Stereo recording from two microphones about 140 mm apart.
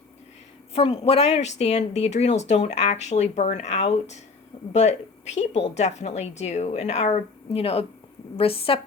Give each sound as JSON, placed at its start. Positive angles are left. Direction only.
{"t": 0.7, "sound": "a woman's voice", "side_deg": 45}